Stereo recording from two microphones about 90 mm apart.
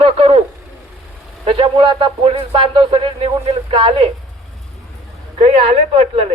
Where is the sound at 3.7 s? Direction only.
70° right (ahead or behind).